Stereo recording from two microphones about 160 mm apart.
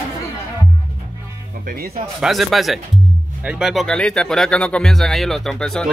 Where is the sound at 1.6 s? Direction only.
65° right (ahead or behind).